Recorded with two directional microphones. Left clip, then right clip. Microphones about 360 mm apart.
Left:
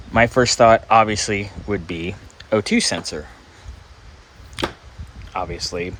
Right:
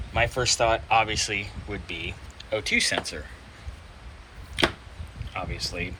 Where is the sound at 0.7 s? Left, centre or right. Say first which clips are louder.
Left 8 dB; left.